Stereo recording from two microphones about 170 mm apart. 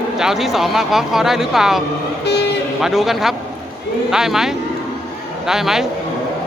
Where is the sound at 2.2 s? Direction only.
80° left.